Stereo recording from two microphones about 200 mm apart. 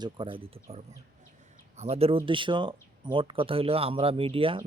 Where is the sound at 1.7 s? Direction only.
30° right (ahead or behind).